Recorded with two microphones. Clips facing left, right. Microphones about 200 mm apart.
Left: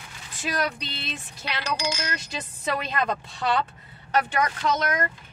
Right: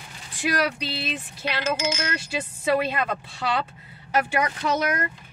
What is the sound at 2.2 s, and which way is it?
Speech, 10° right (ahead or behind).